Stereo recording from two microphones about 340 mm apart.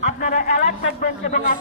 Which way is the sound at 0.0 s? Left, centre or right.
Left.